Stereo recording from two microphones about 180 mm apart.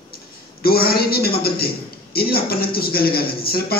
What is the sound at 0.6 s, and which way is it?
A woman's voice, 55° left (ahead or behind).